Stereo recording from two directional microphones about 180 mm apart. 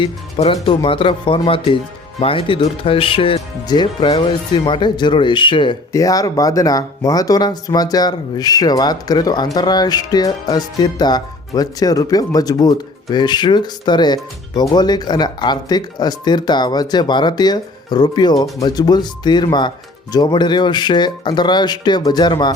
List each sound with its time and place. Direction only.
0.0 s speech: 35° left (ahead or behind)